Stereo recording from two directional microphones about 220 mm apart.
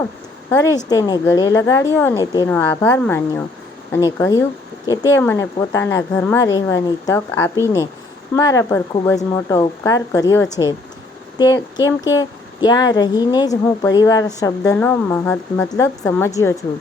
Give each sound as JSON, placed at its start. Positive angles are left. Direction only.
{"t": 0.5, "sound": "a woman's voice", "side_deg": 15}